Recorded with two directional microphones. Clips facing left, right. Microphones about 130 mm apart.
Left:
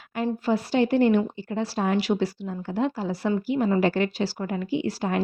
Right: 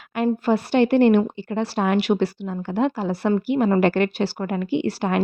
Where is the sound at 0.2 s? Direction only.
65° right (ahead or behind).